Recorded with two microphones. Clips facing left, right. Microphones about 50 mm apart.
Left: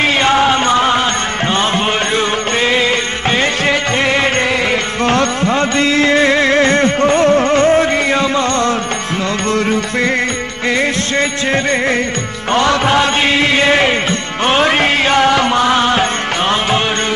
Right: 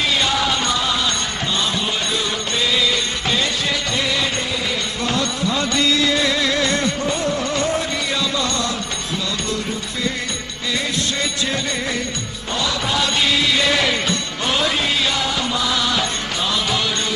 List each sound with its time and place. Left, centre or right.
0.0 s music: left
2.1 s music: left
7.0 s music: left
9.5 s music: left
12.5 s chant: left
14.4 s music: left